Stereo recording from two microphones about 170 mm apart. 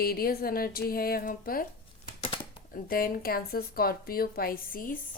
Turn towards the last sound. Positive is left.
turn(degrees=55)  # may be behind; listen again after turning